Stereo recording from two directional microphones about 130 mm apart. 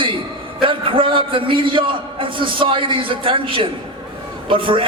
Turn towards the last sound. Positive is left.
turn(degrees=-40)  # may be behind; listen again after turning